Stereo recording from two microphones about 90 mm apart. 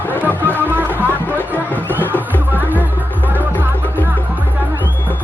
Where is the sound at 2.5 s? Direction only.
20° right (ahead or behind).